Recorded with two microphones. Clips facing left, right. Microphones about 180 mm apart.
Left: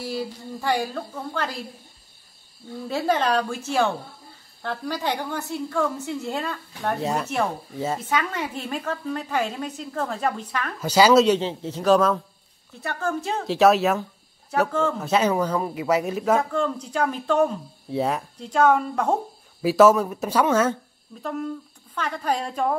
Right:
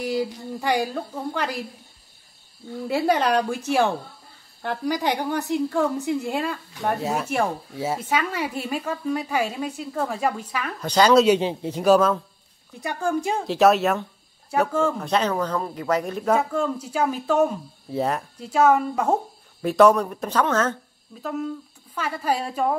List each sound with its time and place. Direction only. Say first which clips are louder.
0.0 s a woman's voice: right 4 dB; 15° right (ahead or behind)
2.9 s a woman's voice: right 2 dB; 10° right (ahead or behind)
10.8 s speech: left 1 dB; 5° left (ahead or behind)
11.2 s a woman's voice: right 2 dB; 10° right (ahead or behind)
13.5 s a woman's voice: left 1 dB; centre (ahead or behind)
15.0 s speech: left 2 dB; 5° left (ahead or behind)
19.6 s speech: even; 5° left (ahead or behind)
21.2 s speech: right 1 dB; 5° right (ahead or behind)